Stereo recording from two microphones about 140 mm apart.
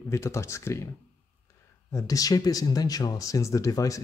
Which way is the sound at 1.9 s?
25° left (ahead or behind).